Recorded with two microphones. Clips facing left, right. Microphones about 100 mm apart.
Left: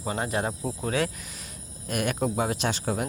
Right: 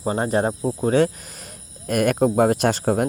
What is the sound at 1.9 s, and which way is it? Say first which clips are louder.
Speech: right 9 dB; 50° right (ahead or behind).